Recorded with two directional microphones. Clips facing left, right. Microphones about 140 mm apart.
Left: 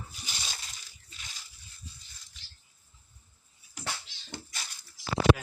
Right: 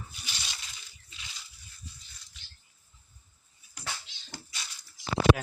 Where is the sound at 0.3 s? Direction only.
45° left (ahead or behind).